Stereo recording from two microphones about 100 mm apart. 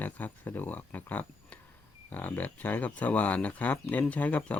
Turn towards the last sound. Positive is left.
turn(degrees=15)  # may be behind; listen again after turning